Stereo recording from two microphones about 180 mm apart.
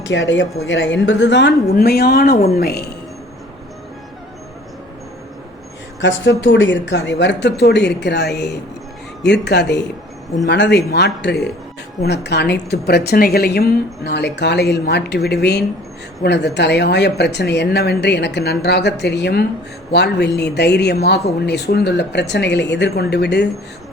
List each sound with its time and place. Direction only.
0.1 s a woman's voice: 90° left; by 2.9 s 60° left (ahead or behind)
6.0 s speech: 85° left; by 23.5 s 70° left (ahead or behind)